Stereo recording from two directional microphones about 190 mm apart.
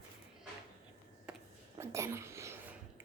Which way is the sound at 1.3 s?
5° right (ahead or behind).